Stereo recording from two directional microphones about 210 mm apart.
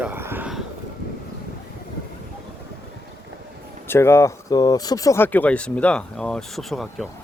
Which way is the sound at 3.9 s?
10° left (ahead or behind).